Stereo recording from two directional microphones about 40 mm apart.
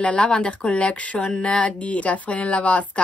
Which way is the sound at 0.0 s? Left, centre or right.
Left.